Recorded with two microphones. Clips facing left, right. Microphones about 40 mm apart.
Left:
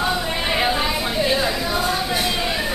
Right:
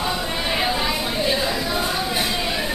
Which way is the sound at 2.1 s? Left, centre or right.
Centre.